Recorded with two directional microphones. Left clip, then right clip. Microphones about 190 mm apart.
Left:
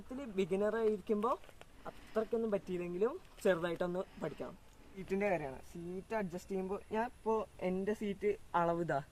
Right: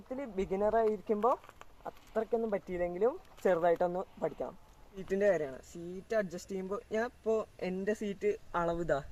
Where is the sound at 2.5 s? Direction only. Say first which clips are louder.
Right 4 dB; 45° left (ahead or behind).